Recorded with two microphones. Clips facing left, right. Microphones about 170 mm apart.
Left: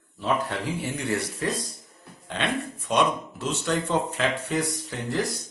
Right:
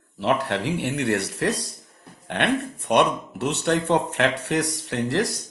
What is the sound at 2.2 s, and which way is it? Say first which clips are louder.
Speech: right 5 dB; 60° right (ahead or behind).